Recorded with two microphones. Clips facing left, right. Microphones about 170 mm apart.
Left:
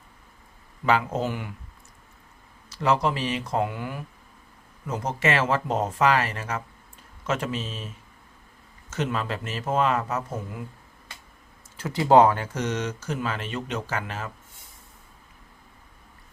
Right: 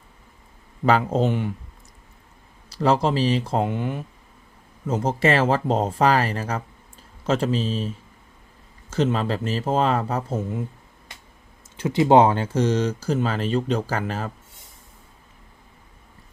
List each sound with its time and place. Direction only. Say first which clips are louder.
0.9 s speech: right 4 dB; 40° right (ahead or behind)
1.2 s speech: right 7 dB; 25° right (ahead or behind)
2.6 s speech: right 3 dB; 35° right (ahead or behind)
8.9 s speech: right 6 dB; 30° right (ahead or behind)
11.8 s speech: right 2 dB; 20° right (ahead or behind); by 14.3 s 35° right (ahead or behind)